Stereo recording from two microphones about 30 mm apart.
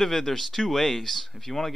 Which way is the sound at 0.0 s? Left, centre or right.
Centre.